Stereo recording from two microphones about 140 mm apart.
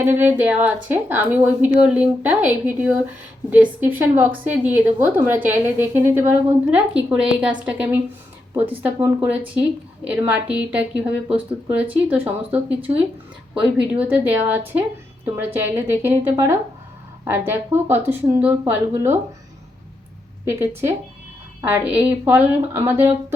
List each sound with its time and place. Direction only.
0.0 s a woman's voice: 15° right (ahead or behind)
10.5 s a woman's voice: 10° right (ahead or behind)
20.4 s a woman's voice: 15° right (ahead or behind)